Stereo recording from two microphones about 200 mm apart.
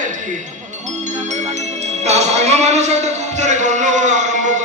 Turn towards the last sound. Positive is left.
turn(degrees=-35)  # may be behind; listen again after turning